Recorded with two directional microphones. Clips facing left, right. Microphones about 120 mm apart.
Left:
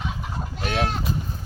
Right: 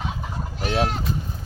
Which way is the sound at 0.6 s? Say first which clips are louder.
Right 2 dB; 25° right (ahead or behind).